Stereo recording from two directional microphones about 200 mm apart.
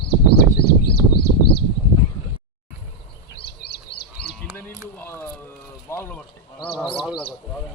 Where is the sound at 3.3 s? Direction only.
55° left (ahead or behind).